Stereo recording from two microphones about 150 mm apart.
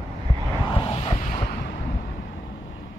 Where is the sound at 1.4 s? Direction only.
90° left.